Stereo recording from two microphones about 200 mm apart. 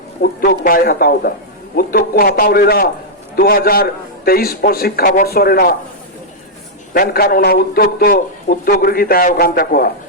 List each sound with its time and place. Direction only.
0.2 s a man's voice: 45° left (ahead or behind)
6.9 s a man's voice: 45° left (ahead or behind)